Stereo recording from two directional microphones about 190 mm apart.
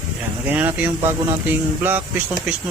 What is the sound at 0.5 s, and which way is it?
Speech, 10° right (ahead or behind).